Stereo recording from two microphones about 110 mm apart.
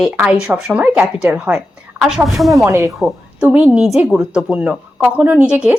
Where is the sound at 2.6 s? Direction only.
30° right (ahead or behind).